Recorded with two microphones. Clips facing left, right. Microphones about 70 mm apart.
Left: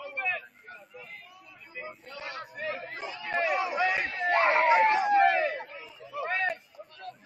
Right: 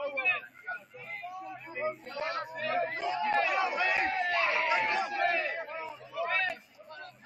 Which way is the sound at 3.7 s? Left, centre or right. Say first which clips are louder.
Left 2 dB; centre.